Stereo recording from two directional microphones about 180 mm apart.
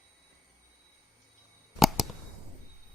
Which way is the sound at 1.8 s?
Centre (ahead or behind).